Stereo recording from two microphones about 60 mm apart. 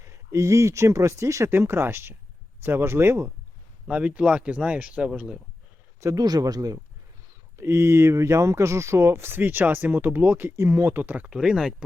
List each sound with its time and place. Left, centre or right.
0.0 s speech: right
3.8 s speech: right
6.1 s speech: right
7.6 s speech: right
10.5 s speech: right
11.3 s speech: centre